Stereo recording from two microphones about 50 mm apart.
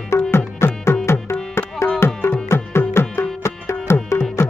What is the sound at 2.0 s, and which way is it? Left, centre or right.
Tabla, left.